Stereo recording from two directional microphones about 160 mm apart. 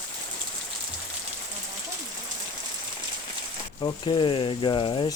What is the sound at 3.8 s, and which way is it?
Speech, 30° left (ahead or behind).